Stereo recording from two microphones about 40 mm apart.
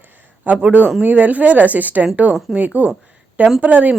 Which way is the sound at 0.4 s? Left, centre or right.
Right.